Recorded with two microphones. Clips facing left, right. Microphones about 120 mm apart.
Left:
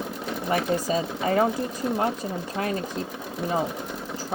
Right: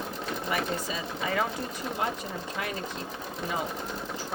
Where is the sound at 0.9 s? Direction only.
40° left (ahead or behind).